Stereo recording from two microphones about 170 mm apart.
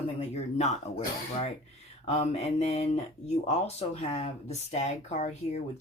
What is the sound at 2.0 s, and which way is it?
Speech, 40° left (ahead or behind).